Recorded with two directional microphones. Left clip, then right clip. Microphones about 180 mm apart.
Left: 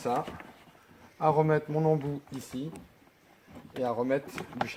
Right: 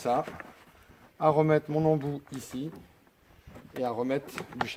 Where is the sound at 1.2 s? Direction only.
60° right (ahead or behind).